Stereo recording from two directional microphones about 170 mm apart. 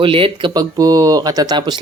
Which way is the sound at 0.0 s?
30° right (ahead or behind).